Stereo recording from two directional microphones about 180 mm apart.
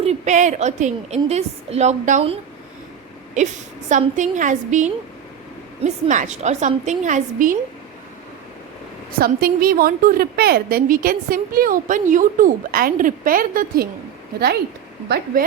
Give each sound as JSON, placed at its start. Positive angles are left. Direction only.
{"t": 0.0, "sound": "a woman's voice", "side_deg": -40}
{"t": 9.1, "sound": "a woman's voice", "side_deg": -55}